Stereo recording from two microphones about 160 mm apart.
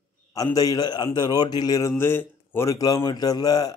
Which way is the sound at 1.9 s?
15° left (ahead or behind).